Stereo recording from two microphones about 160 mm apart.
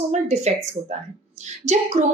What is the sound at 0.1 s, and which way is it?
A woman's voice, 45° right (ahead or behind).